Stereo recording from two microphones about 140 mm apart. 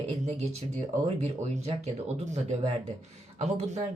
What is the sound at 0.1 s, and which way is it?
Speech, 50° right (ahead or behind).